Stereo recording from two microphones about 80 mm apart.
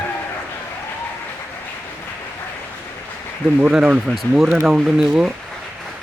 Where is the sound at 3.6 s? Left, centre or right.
Centre.